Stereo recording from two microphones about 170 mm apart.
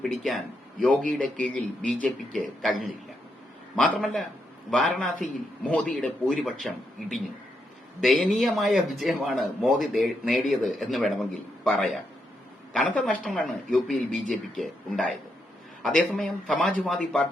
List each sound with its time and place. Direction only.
0.0 s a man's voice: centre (ahead or behind)